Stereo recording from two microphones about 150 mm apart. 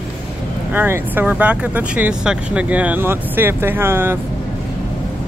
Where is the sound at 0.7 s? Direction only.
15° right (ahead or behind).